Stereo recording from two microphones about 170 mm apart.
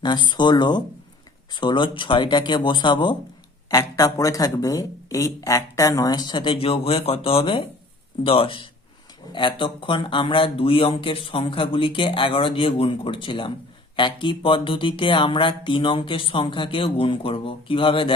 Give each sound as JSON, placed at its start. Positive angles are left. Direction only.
{"t": 0.0, "sound": "speech", "side_deg": 25}